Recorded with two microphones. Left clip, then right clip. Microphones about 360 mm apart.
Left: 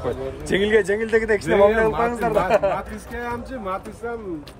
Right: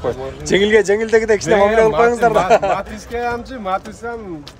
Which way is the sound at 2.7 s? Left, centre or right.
Right.